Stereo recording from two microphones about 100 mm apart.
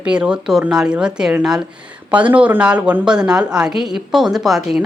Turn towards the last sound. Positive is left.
turn(degrees=-5)  # may be behind; listen again after turning